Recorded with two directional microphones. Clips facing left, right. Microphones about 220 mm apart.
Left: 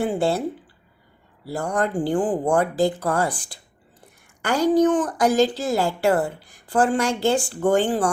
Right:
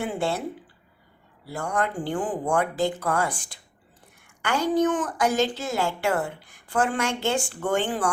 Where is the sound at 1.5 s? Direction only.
35° left (ahead or behind).